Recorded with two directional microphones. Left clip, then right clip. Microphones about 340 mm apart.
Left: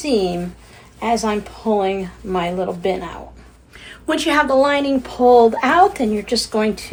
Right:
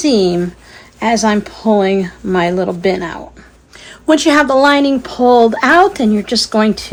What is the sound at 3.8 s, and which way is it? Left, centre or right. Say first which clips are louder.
Speech: right 8 dB; centre.